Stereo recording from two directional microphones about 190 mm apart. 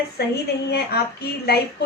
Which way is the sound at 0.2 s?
55° left (ahead or behind).